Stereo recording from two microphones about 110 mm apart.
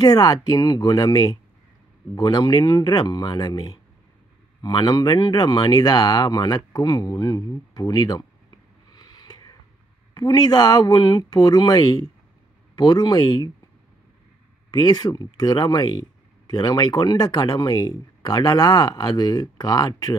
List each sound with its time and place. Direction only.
0.0 s speech: 35° left (ahead or behind)
14.7 s speech: 40° left (ahead or behind)